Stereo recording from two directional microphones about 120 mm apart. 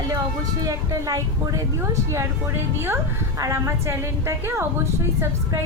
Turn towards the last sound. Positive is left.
turn(degrees=-20)  # may be behind; listen again after turning